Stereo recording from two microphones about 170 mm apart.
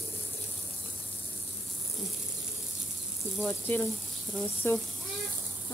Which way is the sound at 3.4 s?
10° left (ahead or behind).